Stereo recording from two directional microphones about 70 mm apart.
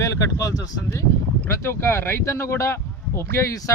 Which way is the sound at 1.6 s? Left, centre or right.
Left.